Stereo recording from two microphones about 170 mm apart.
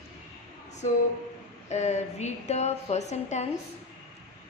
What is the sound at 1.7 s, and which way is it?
A woman's voice, 40° left (ahead or behind).